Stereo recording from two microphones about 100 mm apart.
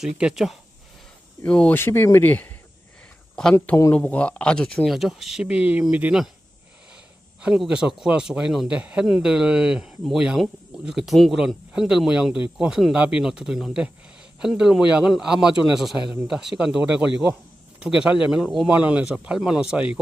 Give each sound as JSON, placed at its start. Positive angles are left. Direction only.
{"t": 0.0, "sound": "speech", "side_deg": -5}
{"t": 1.5, "sound": "speech", "side_deg": 10}
{"t": 3.9, "sound": "speech", "side_deg": 10}
{"t": 7.4, "sound": "speech", "side_deg": -5}